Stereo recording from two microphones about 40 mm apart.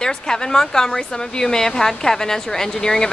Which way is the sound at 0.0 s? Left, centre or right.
Centre.